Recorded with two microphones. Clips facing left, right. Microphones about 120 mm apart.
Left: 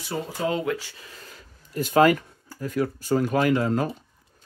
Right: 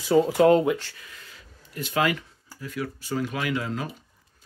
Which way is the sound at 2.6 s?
45° left (ahead or behind).